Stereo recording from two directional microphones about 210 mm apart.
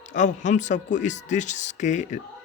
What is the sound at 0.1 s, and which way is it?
Speech, 35° left (ahead or behind).